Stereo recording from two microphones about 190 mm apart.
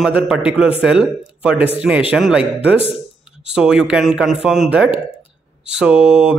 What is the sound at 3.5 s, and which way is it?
Speech, 5° right (ahead or behind).